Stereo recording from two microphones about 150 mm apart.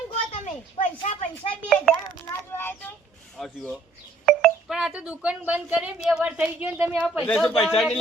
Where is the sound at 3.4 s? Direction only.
Centre (ahead or behind).